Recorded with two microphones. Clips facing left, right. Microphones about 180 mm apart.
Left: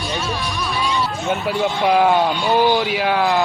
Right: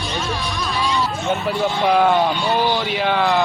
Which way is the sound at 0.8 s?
20° right (ahead or behind).